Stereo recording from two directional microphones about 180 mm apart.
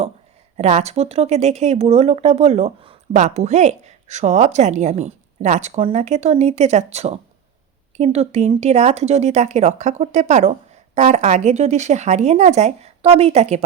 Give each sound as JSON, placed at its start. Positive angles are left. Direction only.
{"t": 0.5, "sound": "speech", "side_deg": -35}